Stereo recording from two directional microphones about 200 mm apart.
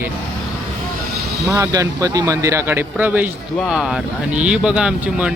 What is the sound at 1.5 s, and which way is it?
Speech, 15° right (ahead or behind).